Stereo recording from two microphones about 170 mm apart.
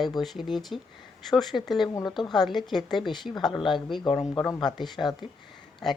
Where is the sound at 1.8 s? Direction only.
20° left (ahead or behind).